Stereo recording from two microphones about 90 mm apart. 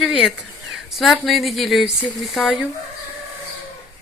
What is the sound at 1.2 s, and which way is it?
Speech, centre (ahead or behind).